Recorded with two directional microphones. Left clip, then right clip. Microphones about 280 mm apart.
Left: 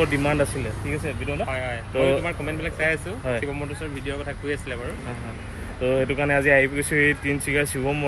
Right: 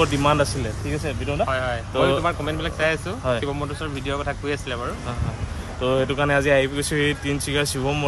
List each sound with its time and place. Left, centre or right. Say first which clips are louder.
0.0 s speech: right 3 dB; centre
4.0 s speech: right 6 dB; right
5.8 s speech: right 1 dB; centre